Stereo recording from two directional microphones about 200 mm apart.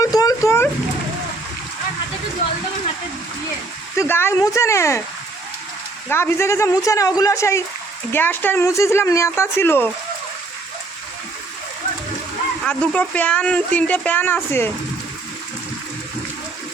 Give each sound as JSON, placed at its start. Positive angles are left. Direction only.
{"t": 0.0, "sound": "a sound", "side_deg": 20}
{"t": 3.9, "sound": "speech", "side_deg": 10}
{"t": 6.1, "sound": "speech", "side_deg": 10}
{"t": 12.6, "sound": "speech", "side_deg": 5}